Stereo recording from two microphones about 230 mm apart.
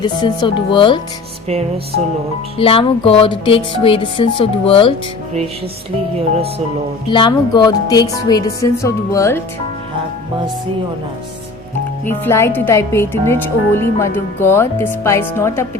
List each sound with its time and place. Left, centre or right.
0.0 s music: centre
2.6 s music: left
7.1 s speech: centre
12.0 s speech: centre